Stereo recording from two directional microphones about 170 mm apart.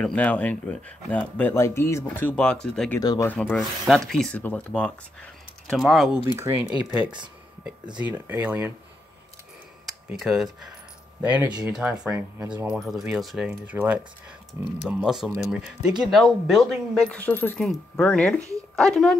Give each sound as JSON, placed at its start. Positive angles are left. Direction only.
{"t": 0.0, "sound": "speech", "side_deg": 10}
{"t": 3.0, "sound": "speech", "side_deg": 25}
{"t": 3.3, "sound": "speech", "side_deg": 5}
{"t": 6.3, "sound": "speech", "side_deg": -15}
{"t": 8.0, "sound": "speech", "side_deg": -10}
{"t": 9.8, "sound": "speech", "side_deg": 0}
{"t": 14.9, "sound": "speech", "side_deg": -5}